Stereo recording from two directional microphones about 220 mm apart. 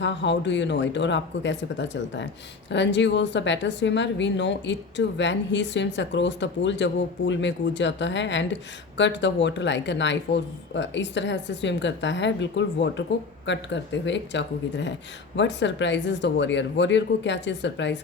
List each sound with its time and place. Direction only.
0.0 s a woman's voice: 55° left (ahead or behind)